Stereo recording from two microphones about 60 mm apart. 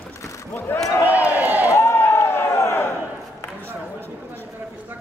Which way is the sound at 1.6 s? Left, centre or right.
Left.